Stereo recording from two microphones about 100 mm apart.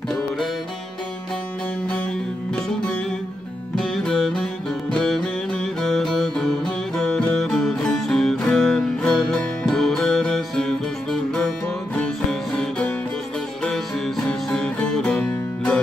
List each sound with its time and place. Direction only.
2.5 s music: 15° left (ahead or behind)
3.7 s music: 5° left (ahead or behind)